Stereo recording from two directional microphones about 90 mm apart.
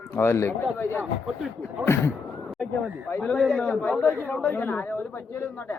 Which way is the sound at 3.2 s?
10° left (ahead or behind).